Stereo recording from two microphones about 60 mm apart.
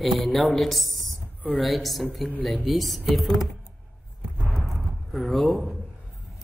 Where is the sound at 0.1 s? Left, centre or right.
Centre.